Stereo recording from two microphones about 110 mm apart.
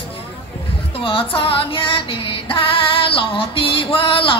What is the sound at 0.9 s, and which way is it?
Female singing, 55° left (ahead or behind).